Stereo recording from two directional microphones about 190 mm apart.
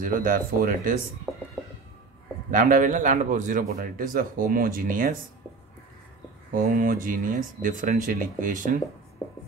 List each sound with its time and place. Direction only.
0.0 s a man's voice: 45° right (ahead or behind)
2.5 s a man's voice: 45° right (ahead or behind)
6.5 s a man's voice: 45° right (ahead or behind)